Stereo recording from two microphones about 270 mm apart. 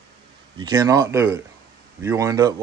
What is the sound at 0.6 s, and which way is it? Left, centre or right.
Speech, centre.